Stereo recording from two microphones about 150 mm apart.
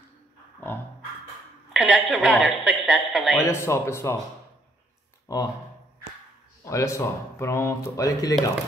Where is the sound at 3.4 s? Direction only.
15° left (ahead or behind).